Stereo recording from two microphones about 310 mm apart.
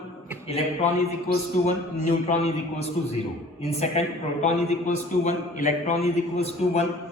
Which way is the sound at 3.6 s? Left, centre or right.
Left.